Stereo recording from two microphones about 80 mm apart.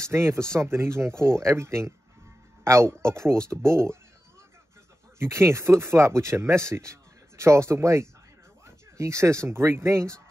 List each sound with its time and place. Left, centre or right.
0.0 s speech: right
5.2 s speech: right